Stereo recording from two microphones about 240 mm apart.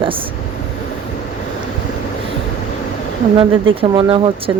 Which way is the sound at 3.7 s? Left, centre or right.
Right.